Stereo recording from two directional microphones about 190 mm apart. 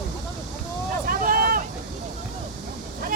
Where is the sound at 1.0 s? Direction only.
50° right (ahead or behind).